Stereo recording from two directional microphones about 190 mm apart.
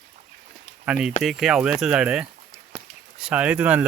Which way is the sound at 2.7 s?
5° right (ahead or behind).